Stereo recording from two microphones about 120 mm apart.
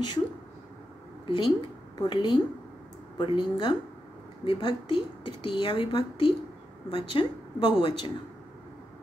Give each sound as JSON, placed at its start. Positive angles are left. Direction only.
{"t": 1.2, "sound": "a woman's voice", "side_deg": 40}